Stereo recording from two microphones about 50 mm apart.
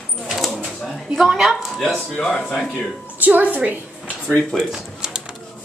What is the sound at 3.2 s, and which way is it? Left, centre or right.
Speech, right.